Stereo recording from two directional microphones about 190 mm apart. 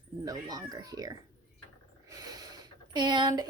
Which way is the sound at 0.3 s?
20° right (ahead or behind).